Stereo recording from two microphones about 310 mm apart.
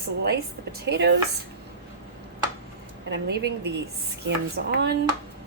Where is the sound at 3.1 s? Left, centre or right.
Right.